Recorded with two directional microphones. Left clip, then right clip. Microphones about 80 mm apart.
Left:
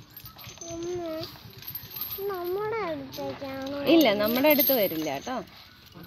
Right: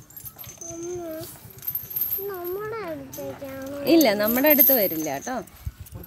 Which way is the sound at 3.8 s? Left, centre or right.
Right.